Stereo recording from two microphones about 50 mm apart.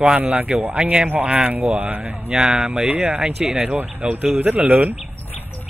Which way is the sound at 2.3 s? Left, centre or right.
Centre.